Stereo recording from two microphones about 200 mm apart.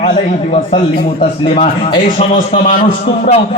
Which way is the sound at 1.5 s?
30° left (ahead or behind).